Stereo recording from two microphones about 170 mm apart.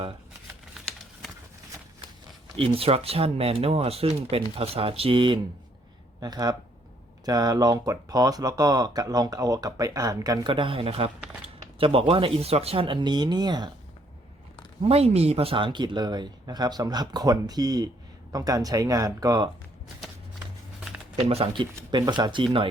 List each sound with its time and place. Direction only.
2.6 s speech: 35° right (ahead or behind)
14.8 s speech: 35° right (ahead or behind); by 19.5 s 20° right (ahead or behind)
21.2 s speech: 35° right (ahead or behind)